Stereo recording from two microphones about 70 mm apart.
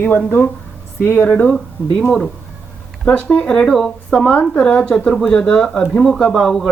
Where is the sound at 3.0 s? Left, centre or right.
Centre.